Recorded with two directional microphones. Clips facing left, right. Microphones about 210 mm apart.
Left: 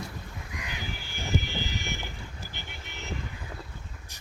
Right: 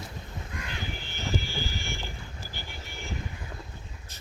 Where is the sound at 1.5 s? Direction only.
20° left (ahead or behind).